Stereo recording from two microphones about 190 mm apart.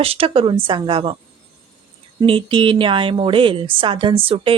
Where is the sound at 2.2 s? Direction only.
25° right (ahead or behind).